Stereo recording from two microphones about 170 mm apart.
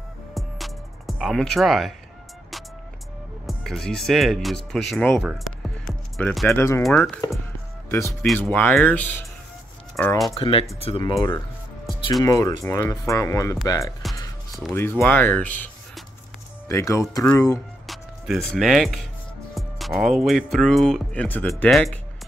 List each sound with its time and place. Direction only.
0.3 s music: centre (ahead or behind)
3.4 s speech: centre (ahead or behind)
6.5 s speech: 15° left (ahead or behind)
6.8 s speech: centre (ahead or behind)
7.9 s speech: 15° left (ahead or behind)
10.3 s speech: 35° left (ahead or behind); by 17.0 s 15° left (ahead or behind)
17.8 s music: centre (ahead or behind)
18.5 s speech: centre (ahead or behind)